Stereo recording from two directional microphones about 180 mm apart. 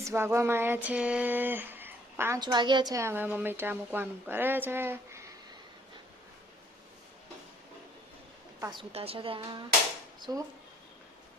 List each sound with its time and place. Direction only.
0.0 s a woman's voice: 15° right (ahead or behind)
2.4 s a woman's voice: 25° right (ahead or behind)
8.6 s a woman's voice: 25° right (ahead or behind)